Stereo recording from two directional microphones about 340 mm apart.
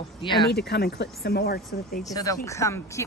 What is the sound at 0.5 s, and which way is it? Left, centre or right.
Speech, left.